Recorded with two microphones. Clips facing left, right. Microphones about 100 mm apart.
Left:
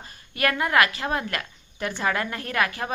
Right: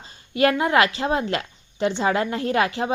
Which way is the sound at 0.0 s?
25° right (ahead or behind).